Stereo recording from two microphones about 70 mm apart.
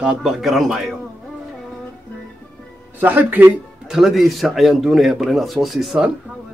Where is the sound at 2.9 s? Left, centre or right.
Right.